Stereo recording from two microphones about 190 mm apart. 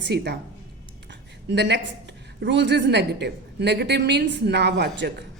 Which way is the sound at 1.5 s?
65° right (ahead or behind).